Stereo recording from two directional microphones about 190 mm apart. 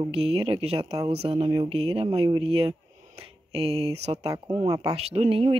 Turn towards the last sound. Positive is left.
turn(degrees=-30)  # may be behind; listen again after turning